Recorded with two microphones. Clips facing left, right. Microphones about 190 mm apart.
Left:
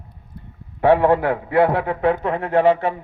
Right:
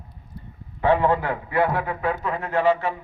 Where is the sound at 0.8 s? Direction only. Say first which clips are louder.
Left 5 dB; 70° left (ahead or behind).